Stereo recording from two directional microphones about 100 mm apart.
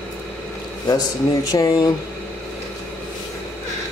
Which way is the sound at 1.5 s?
35° left (ahead or behind).